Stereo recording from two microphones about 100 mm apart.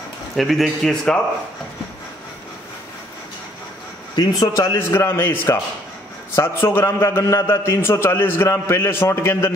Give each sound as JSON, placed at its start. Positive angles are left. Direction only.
{"t": 0.4, "sound": "a man's voice", "side_deg": 0}
{"t": 4.1, "sound": "a man's voice", "side_deg": 40}